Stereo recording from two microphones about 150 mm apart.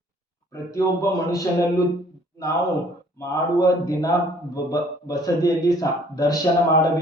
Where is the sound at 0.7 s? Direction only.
20° left (ahead or behind).